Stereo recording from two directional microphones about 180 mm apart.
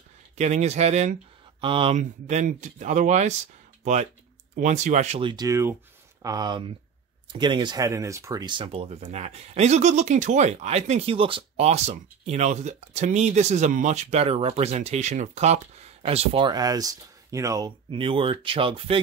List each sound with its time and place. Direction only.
0.4 s speech: 40° right (ahead or behind)
2.0 s speech: 40° right (ahead or behind)
5.3 s speech: 20° right (ahead or behind)